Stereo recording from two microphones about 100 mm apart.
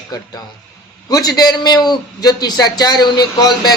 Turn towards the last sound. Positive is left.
turn(degrees=45)  # may be behind; listen again after turning